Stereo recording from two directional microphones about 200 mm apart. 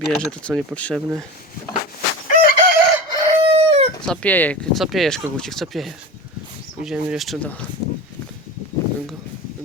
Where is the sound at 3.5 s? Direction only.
30° right (ahead or behind).